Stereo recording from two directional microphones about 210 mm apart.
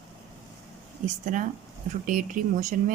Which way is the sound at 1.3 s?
35° right (ahead or behind).